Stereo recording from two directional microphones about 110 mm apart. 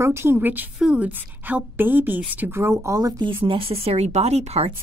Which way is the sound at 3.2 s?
55° right (ahead or behind).